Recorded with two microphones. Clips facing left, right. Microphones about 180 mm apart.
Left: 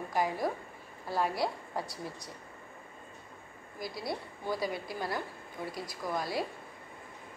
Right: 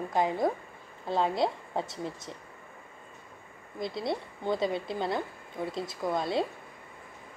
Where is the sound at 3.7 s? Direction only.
25° right (ahead or behind).